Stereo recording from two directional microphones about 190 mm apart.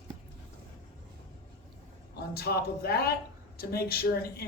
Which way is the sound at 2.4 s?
55° left (ahead or behind).